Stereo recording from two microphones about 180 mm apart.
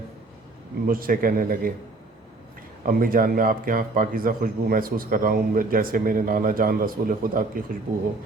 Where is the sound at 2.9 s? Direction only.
55° right (ahead or behind).